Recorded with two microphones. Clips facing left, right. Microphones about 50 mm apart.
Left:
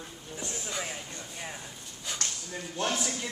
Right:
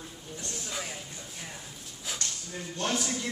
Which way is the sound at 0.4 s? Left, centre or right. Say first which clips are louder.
Left 2 dB; centre.